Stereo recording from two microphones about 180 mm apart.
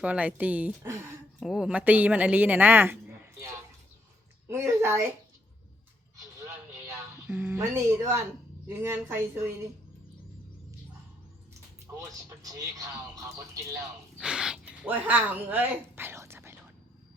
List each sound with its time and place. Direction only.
0.0 s a woman's voice: 5° right (ahead or behind)
1.4 s a woman's voice: centre (ahead or behind)
6.4 s a sound: 15° right (ahead or behind)
8.6 s a woman's voice: 15° right (ahead or behind)
12.0 s speech: 20° right (ahead or behind)
14.2 s speech: 5° right (ahead or behind)